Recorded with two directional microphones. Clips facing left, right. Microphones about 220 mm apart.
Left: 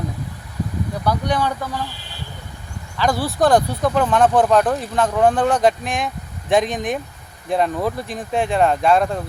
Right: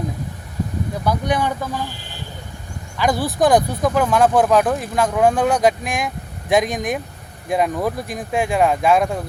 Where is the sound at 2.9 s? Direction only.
15° right (ahead or behind).